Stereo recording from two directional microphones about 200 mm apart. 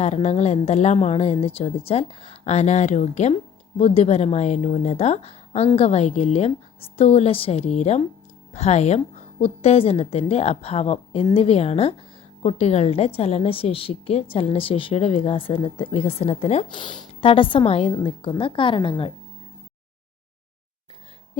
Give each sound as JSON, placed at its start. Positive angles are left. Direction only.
{"t": 0.0, "sound": "a woman's voice", "side_deg": 35}